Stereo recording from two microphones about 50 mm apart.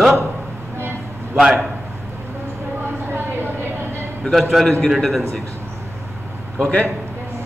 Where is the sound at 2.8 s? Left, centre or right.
Right.